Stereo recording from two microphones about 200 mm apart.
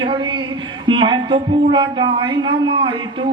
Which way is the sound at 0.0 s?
25° right (ahead or behind).